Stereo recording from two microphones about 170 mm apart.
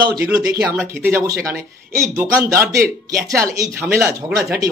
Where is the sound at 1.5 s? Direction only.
15° right (ahead or behind).